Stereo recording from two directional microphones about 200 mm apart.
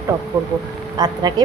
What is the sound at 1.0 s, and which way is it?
Speech, 20° right (ahead or behind).